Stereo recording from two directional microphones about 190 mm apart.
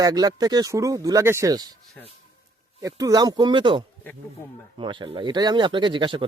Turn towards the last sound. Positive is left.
turn(degrees=-25)  # may be behind; listen again after turning